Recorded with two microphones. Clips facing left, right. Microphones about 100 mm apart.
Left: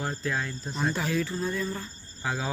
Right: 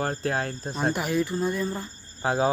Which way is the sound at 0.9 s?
15° right (ahead or behind).